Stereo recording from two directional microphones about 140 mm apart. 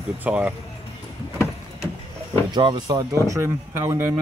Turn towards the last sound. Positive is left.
turn(degrees=-20)  # may be behind; listen again after turning